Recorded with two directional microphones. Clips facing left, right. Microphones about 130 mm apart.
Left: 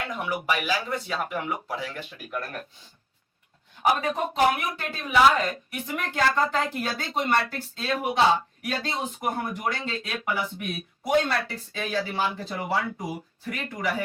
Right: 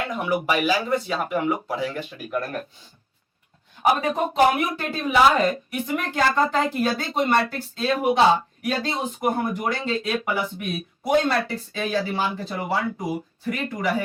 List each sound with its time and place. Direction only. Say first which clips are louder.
0.0 s speech: right 5 dB; 15° right (ahead or behind)
3.8 s speech: right 3 dB; 20° right (ahead or behind)